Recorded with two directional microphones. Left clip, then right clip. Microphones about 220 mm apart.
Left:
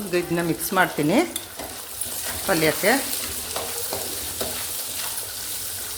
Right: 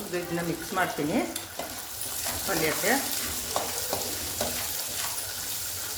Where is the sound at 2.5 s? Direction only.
55° left (ahead or behind).